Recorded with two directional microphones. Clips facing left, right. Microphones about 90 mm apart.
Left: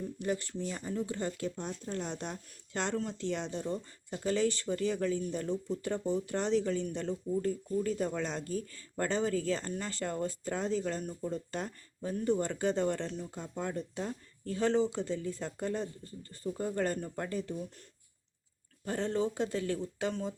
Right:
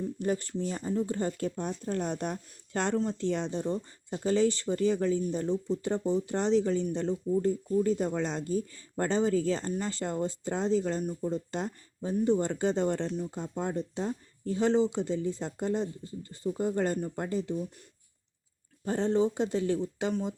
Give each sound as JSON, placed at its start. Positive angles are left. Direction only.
{"t": 0.2, "sound": "speech", "side_deg": -35}
{"t": 3.0, "sound": "speech", "side_deg": -30}
{"t": 18.9, "sound": "speech", "side_deg": -25}